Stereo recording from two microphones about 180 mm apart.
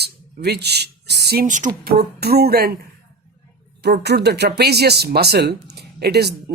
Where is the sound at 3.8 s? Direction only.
65° right (ahead or behind).